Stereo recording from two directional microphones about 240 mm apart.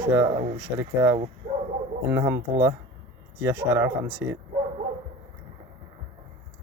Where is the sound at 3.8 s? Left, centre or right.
Centre.